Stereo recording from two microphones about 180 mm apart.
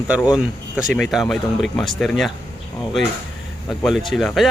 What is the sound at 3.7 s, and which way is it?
Speech, centre (ahead or behind).